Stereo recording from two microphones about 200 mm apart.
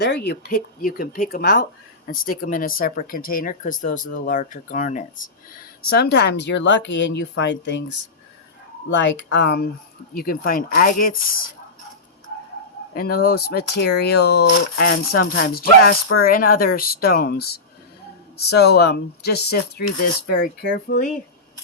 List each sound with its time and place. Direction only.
0.0 s speech: 55° left (ahead or behind)
12.9 s speech: 50° left (ahead or behind)
20.8 s speech: 40° left (ahead or behind)